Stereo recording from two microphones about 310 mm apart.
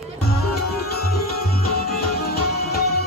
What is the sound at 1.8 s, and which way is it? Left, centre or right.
Music, left.